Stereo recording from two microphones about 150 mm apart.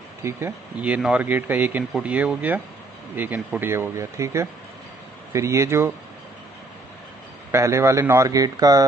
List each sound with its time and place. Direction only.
0.2 s speech: 15° right (ahead or behind)
7.5 s speech: 20° right (ahead or behind)